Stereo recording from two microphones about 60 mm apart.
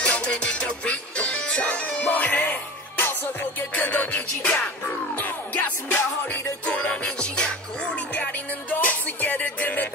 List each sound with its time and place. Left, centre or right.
0.0 s music: centre
6.6 s music: left